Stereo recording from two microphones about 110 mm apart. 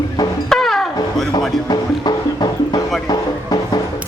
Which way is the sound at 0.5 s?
Centre (ahead or behind).